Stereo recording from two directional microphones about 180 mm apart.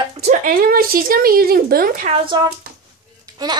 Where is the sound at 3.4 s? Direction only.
20° right (ahead or behind).